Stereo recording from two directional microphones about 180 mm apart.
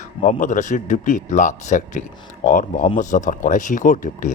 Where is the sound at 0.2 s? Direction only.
45° left (ahead or behind).